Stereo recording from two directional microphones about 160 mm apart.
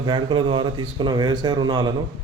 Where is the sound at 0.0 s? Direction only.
30° right (ahead or behind).